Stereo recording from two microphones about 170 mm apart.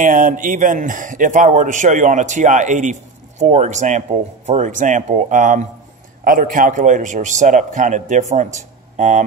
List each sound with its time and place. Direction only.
0.0 s a man's voice: 50° right (ahead or behind)